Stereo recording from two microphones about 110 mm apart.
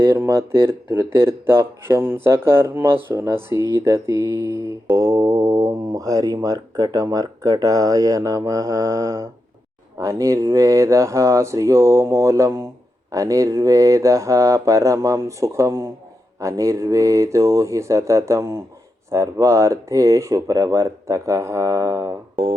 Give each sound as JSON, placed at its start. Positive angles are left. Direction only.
{"t": 0.0, "sound": "speech", "side_deg": -25}
{"t": 3.8, "sound": "mantra", "side_deg": -25}
{"t": 10.0, "sound": "speech", "side_deg": -30}